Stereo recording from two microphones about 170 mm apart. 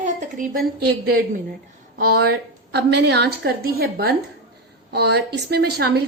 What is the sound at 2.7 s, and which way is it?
A woman's voice, 75° right (ahead or behind).